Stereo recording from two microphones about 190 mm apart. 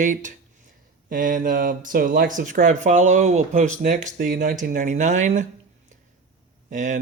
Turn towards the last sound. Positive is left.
turn(degrees=-40)  # may be behind; listen again after turning